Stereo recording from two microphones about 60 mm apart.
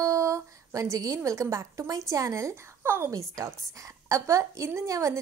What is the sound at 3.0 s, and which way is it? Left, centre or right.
A woman's voice, right.